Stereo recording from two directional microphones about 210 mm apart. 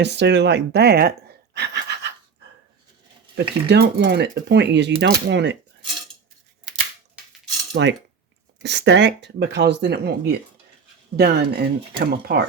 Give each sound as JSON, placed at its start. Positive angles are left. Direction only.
{"t": 0.0, "sound": "speech", "side_deg": -55}
{"t": 1.5, "sound": "a sound", "side_deg": -55}
{"t": 3.3, "sound": "speech", "side_deg": -50}
{"t": 7.7, "sound": "cutlery", "side_deg": -55}
{"t": 8.6, "sound": "speech", "side_deg": -55}